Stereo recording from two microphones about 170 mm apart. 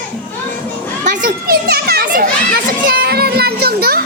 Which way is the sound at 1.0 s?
55° right (ahead or behind).